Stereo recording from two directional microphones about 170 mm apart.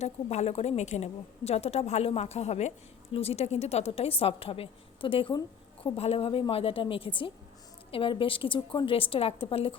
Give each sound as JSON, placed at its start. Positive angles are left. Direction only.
{"t": 0.0, "sound": "a woman's voice", "side_deg": 40}